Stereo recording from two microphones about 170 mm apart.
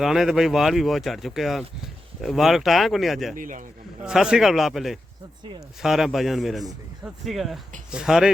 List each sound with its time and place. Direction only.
0.0 s speech: centre (ahead or behind)
3.3 s a man's voice: 50° right (ahead or behind)
4.0 s speech: 5° right (ahead or behind)